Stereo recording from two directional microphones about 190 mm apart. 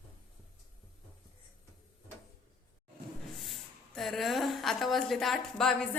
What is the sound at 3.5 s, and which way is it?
A woman's voice, centre (ahead or behind).